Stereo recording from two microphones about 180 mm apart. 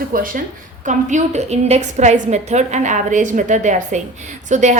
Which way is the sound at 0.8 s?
40° right (ahead or behind).